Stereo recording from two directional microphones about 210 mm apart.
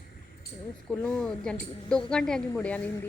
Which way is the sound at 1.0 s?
5° left (ahead or behind).